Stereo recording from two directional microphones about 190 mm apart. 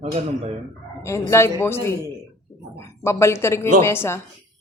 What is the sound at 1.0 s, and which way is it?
Speech, 15° left (ahead or behind).